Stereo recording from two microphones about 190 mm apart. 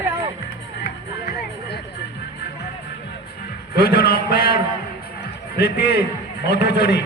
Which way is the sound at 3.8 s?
55° left (ahead or behind).